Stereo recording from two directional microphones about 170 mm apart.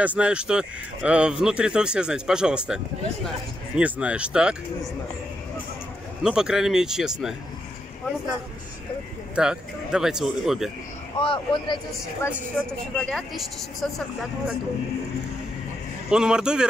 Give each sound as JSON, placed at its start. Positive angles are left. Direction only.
{"t": 0.0, "sound": "speech", "side_deg": -5}
{"t": 6.2, "sound": "speech", "side_deg": -5}
{"t": 9.3, "sound": "speech", "side_deg": -5}
{"t": 11.1, "sound": "speech", "side_deg": 30}
{"t": 12.2, "sound": "a woman's voice", "side_deg": 15}
{"t": 12.9, "sound": "speech", "side_deg": 5}
{"t": 16.1, "sound": "speech", "side_deg": -5}